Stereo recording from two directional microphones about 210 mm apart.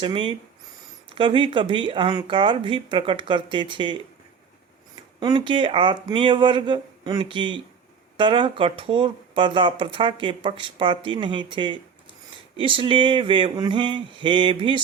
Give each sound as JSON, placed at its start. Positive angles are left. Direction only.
{"t": 0.0, "sound": "speech", "side_deg": -25}
{"t": 5.2, "sound": "speech", "side_deg": -25}